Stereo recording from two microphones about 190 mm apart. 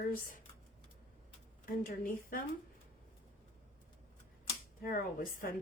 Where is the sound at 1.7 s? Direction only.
45° left (ahead or behind).